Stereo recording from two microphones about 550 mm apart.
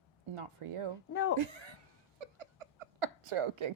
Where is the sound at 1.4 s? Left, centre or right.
Right.